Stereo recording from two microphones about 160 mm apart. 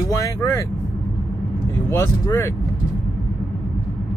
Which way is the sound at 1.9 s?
15° left (ahead or behind).